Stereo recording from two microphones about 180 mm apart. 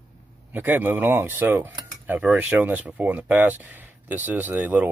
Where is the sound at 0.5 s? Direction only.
10° right (ahead or behind).